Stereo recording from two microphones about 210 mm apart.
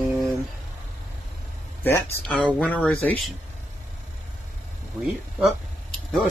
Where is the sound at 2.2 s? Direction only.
5° left (ahead or behind).